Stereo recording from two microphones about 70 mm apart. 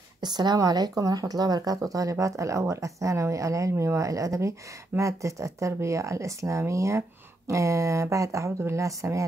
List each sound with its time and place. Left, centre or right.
0.2 s speech: right
0.6 s speech: right